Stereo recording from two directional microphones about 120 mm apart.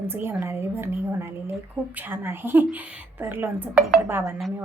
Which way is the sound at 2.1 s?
20° right (ahead or behind).